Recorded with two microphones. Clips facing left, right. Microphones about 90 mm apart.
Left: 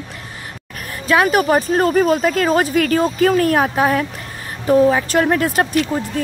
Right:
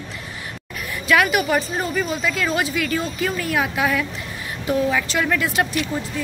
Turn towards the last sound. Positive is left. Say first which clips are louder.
# left 6 dB
turn(degrees=45)  # may be behind; listen again after turning